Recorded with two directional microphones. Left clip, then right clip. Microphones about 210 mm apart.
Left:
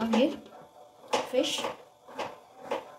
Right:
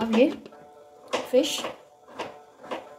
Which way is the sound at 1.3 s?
45° right (ahead or behind).